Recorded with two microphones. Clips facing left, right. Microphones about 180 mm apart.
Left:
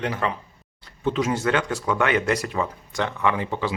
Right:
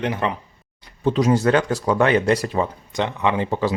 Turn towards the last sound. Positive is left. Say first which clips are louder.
# right 5 dB
turn(degrees=-40)  # may be behind; listen again after turning